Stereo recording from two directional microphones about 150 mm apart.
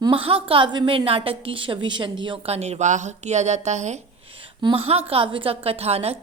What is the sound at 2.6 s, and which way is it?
A woman's voice, 50° right (ahead or behind).